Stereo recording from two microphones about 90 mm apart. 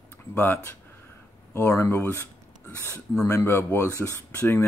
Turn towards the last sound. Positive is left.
turn(degrees=25)  # may be behind; listen again after turning